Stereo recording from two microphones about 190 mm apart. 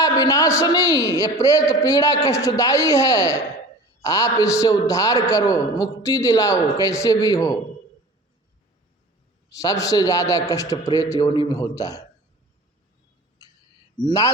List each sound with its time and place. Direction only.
0.0 s a man's voice: 20° left (ahead or behind)
9.5 s a man's voice: 15° left (ahead or behind)
14.0 s a man's voice: 20° left (ahead or behind)